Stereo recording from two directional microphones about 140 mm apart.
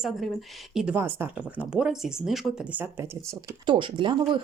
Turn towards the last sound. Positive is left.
turn(degrees=-35)  # may be behind; listen again after turning